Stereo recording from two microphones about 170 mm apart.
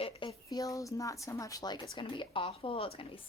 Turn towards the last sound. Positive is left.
turn(degrees=30)  # may be behind; listen again after turning